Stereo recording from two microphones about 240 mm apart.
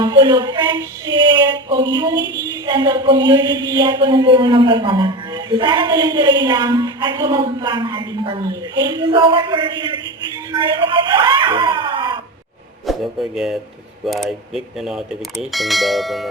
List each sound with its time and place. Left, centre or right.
0.0 s a sound: centre
2.6 s speech: centre
12.8 s speech: centre